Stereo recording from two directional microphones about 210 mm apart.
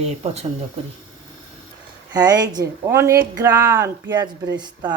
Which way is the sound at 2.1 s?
20° right (ahead or behind).